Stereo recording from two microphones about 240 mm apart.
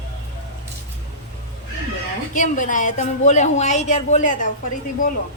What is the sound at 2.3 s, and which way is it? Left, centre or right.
Speech, left.